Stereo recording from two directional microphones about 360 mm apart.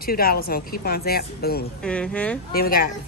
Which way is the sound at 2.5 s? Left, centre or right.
Left.